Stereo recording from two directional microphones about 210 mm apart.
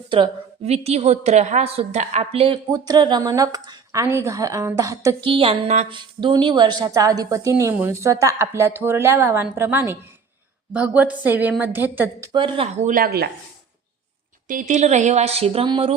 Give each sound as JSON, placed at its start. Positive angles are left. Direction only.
{"t": 0.1, "sound": "a woman's voice", "side_deg": -25}
{"t": 12.3, "sound": "speech", "side_deg": -25}
{"t": 14.4, "sound": "speech", "side_deg": -40}